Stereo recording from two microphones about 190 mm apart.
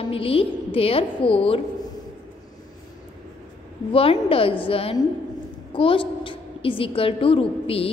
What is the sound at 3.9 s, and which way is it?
A woman's voice, 30° left (ahead or behind).